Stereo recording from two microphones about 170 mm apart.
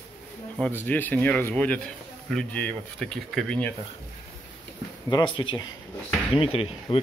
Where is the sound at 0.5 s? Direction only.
10° left (ahead or behind).